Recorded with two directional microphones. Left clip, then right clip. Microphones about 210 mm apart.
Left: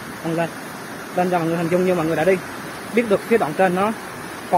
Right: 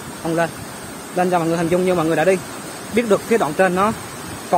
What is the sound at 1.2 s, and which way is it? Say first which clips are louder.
Speech: right 2 dB; 20° right (ahead or behind).